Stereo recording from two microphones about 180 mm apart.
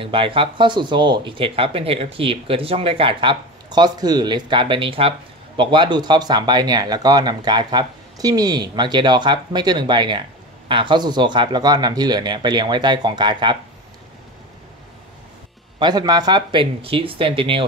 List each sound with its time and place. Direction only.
0.0 s speech: 30° right (ahead or behind)
15.8 s speech: 25° right (ahead or behind)